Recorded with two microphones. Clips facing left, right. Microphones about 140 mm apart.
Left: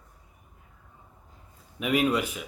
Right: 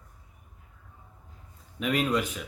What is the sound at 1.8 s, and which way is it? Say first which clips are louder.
Speech: left 2 dB; 10° left (ahead or behind).